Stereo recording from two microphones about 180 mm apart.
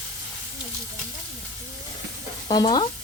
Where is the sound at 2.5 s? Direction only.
25° left (ahead or behind).